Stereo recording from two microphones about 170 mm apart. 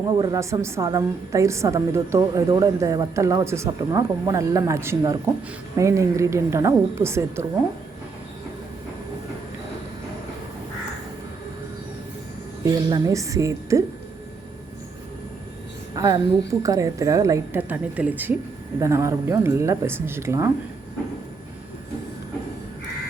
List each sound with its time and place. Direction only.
0.2 s a woman's voice: 25° right (ahead or behind)
12.7 s a woman's voice: 20° right (ahead or behind)
16.0 s a woman's voice: 20° right (ahead or behind)